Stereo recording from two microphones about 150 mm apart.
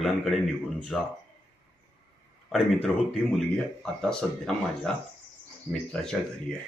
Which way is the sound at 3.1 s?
Centre (ahead or behind).